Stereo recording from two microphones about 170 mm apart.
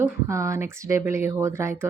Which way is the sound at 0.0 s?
15° right (ahead or behind).